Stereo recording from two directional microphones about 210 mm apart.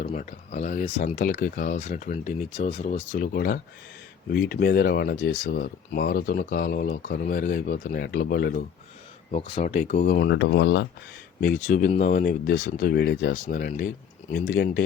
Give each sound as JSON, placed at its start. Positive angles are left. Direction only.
{"t": 0.0, "sound": "speech", "side_deg": 40}
{"t": 9.3, "sound": "speech", "side_deg": 35}
{"t": 10.2, "sound": "speech", "side_deg": 60}
{"t": 11.6, "sound": "speech", "side_deg": 35}
{"t": 13.3, "sound": "speech", "side_deg": 40}
{"t": 14.3, "sound": "speech", "side_deg": 50}